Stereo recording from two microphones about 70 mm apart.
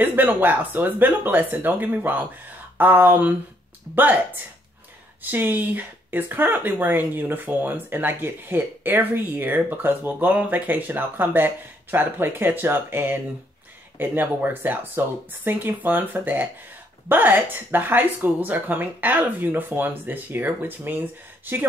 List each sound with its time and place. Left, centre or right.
0.0 s speech: right
5.2 s speech: right